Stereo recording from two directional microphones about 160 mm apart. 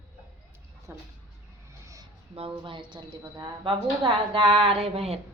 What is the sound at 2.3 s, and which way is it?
A woman's voice, 30° right (ahead or behind).